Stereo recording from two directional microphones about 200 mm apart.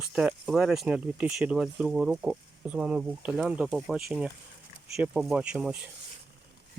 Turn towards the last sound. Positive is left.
turn(degrees=-5)  # may be behind; listen again after turning